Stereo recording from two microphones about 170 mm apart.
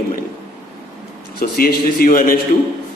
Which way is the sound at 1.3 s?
60° left (ahead or behind).